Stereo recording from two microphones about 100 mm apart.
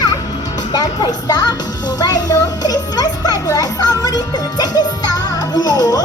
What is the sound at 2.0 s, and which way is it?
Music, 40° left (ahead or behind).